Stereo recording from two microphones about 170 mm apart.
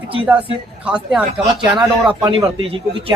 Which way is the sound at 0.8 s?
5° right (ahead or behind).